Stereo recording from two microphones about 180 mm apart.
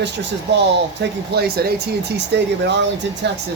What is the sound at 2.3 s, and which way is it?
Speech, 75° right (ahead or behind).